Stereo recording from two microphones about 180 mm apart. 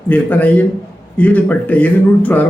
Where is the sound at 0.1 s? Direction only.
10° left (ahead or behind).